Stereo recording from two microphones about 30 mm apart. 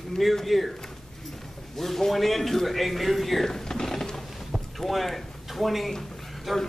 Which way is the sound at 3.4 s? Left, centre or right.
Centre.